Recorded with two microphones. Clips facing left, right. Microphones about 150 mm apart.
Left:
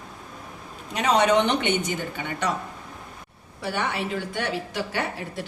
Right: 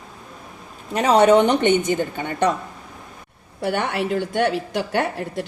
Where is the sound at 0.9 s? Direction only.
40° right (ahead or behind).